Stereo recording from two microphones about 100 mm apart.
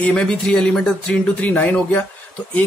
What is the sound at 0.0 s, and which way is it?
A man's voice, 10° left (ahead or behind).